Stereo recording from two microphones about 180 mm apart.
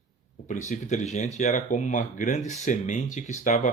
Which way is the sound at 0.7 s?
40° left (ahead or behind).